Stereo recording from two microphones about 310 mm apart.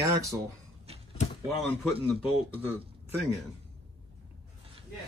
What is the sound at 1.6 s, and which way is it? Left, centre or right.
A man's voice, centre.